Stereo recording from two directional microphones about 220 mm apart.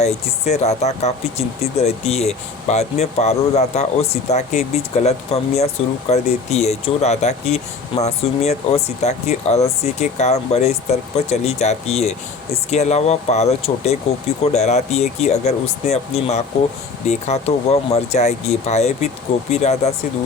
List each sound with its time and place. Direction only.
0.0 s speech: 30° left (ahead or behind)